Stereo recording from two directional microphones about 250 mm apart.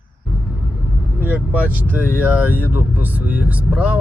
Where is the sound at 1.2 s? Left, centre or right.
Centre.